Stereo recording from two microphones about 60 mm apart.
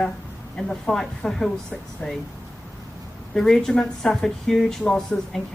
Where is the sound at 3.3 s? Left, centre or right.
Centre.